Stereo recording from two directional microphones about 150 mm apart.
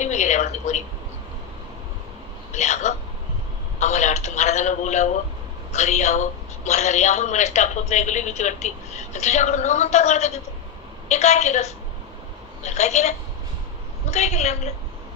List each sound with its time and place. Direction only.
0.0 s a sound: 50° left (ahead or behind)
2.5 s speech: 50° left (ahead or behind)
3.8 s telephone: 50° left (ahead or behind)
5.7 s a man's voice: 50° left (ahead or behind)
14.1 s a man's voice: 50° left (ahead or behind)